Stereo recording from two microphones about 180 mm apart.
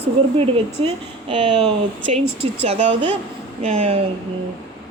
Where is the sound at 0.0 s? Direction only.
30° right (ahead or behind).